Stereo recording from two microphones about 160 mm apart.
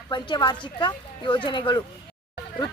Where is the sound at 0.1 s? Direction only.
30° left (ahead or behind).